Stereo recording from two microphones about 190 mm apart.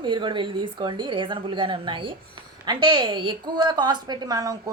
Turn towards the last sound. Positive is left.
turn(degrees=-20)  # may be behind; listen again after turning